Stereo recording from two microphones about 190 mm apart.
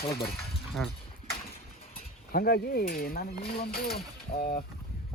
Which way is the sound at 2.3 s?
55° left (ahead or behind).